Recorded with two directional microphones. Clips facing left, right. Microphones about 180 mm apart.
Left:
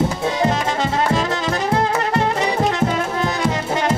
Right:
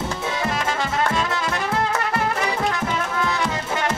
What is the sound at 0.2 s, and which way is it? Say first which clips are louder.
Music: left 6 dB; 35° left (ahead or behind).